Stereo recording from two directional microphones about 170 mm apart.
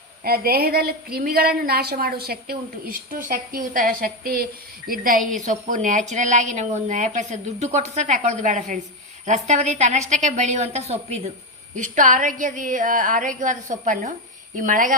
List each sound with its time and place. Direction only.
0.3 s a woman's voice: 65° right (ahead or behind); by 11.3 s 40° right (ahead or behind)
11.8 s a woman's voice: 50° right (ahead or behind)